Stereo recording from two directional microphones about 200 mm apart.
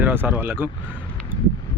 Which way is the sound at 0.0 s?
10° right (ahead or behind).